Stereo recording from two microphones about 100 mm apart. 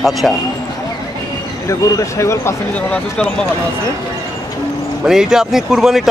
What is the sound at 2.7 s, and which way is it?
Speech, 10° left (ahead or behind).